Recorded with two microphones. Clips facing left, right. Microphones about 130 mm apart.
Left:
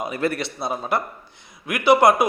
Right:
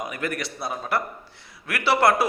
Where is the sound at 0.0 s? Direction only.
30° left (ahead or behind).